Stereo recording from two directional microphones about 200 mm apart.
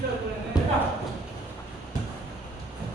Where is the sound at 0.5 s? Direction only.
20° left (ahead or behind).